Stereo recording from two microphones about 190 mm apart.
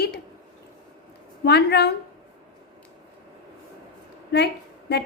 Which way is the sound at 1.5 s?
60° left (ahead or behind).